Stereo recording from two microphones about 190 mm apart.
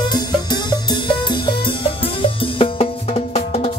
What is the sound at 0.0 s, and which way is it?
Music, 20° left (ahead or behind).